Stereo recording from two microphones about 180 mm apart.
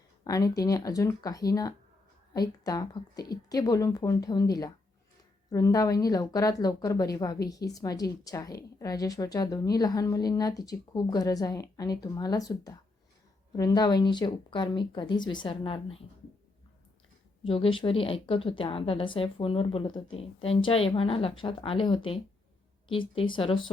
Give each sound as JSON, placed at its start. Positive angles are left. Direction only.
{"t": 0.3, "sound": "a woman's voice", "side_deg": 20}
{"t": 17.4, "sound": "a woman's voice", "side_deg": 30}